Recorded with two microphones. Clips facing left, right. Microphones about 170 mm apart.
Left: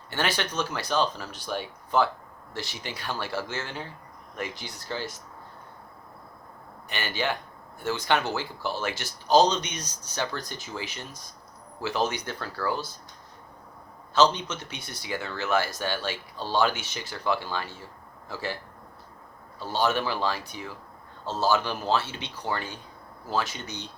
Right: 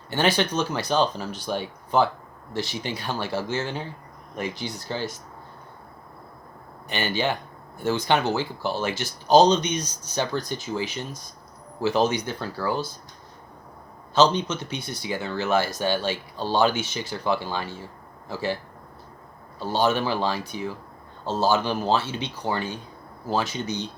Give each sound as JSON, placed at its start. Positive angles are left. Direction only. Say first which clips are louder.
{"t": 0.1, "sound": "speech", "louder": "right 6 dB", "side_deg": -20}
{"t": 6.8, "sound": "speech", "louder": "right 4 dB", "side_deg": -25}
{"t": 14.7, "sound": "speech", "louder": "right 5 dB", "side_deg": -20}
{"t": 19.5, "sound": "speech", "louder": "right 3 dB", "side_deg": -20}